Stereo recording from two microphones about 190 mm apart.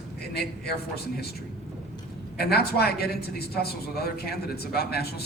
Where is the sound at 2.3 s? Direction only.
55° left (ahead or behind).